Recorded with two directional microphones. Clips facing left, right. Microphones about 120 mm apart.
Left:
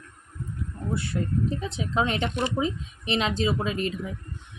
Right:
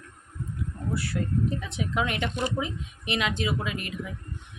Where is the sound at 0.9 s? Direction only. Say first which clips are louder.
Left 1 dB; 25° left (ahead or behind).